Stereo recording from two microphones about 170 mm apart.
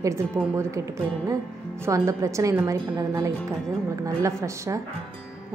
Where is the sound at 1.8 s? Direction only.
15° right (ahead or behind).